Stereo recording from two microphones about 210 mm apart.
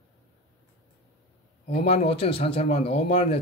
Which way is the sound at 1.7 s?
25° left (ahead or behind).